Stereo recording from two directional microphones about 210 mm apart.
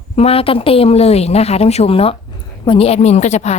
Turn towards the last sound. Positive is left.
turn(degrees=30)  # may be behind; listen again after turning